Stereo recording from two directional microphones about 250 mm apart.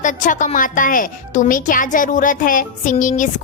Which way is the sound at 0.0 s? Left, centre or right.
Left.